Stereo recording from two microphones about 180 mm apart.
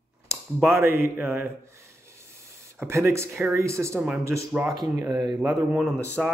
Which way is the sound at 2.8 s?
15° right (ahead or behind).